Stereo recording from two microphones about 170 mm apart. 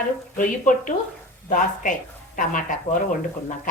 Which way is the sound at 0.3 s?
50° left (ahead or behind).